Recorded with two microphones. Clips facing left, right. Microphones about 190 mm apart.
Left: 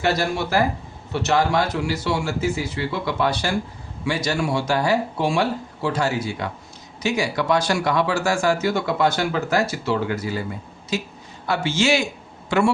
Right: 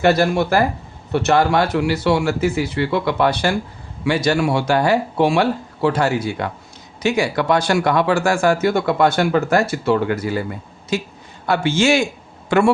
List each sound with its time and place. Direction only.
0.0 s a man's voice: 55° right (ahead or behind)